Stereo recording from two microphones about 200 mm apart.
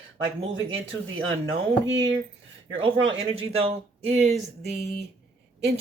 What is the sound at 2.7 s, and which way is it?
Speech, 65° right (ahead or behind).